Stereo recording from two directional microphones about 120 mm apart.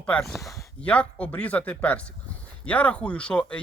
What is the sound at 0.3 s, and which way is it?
Speech, 25° left (ahead or behind).